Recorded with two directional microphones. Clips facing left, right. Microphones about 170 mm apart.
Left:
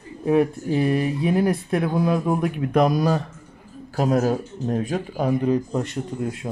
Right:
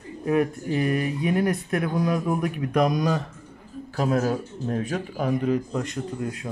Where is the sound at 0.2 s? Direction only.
30° left (ahead or behind).